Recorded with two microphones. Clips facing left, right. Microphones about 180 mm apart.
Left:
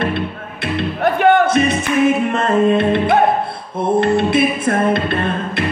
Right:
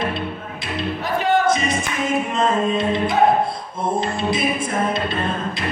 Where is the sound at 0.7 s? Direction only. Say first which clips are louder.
Left 6 dB; 60° left (ahead or behind).